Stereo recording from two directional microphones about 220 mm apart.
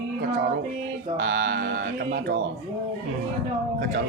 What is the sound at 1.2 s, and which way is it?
Speech, 55° right (ahead or behind).